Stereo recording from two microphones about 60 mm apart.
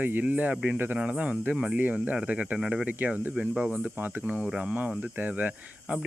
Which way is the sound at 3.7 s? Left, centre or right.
Right.